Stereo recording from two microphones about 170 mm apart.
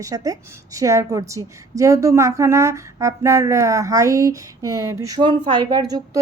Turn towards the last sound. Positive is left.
turn(degrees=-25)  # may be behind; listen again after turning